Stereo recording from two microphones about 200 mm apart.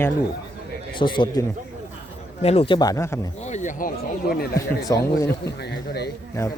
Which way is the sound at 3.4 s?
35° left (ahead or behind).